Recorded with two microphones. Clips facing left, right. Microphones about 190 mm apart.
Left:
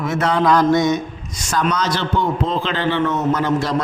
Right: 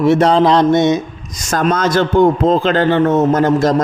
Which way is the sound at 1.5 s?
45° right (ahead or behind).